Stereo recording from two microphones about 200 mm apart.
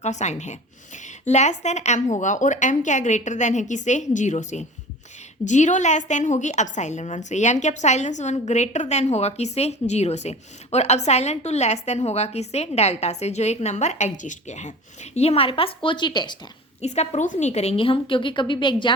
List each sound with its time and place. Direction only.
0.0 s a woman's voice: 35° left (ahead or behind)
16.8 s a woman's voice: 35° left (ahead or behind)